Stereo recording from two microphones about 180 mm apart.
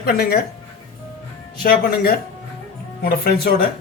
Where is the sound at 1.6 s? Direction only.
55° left (ahead or behind).